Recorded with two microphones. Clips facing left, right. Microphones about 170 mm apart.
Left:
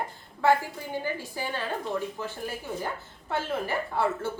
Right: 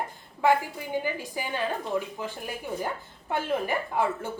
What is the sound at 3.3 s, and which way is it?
A woman's voice, 15° right (ahead or behind).